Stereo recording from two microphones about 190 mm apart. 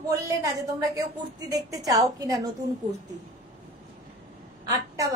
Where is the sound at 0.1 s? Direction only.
15° right (ahead or behind).